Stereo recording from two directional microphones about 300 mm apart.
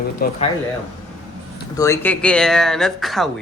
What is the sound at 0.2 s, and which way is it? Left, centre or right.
Speech, left.